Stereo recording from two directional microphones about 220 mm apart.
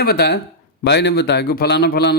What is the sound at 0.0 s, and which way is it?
A man's voice, 45° left (ahead or behind).